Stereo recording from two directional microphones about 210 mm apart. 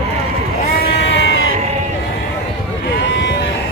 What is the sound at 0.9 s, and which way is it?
Crowd, 60° left (ahead or behind).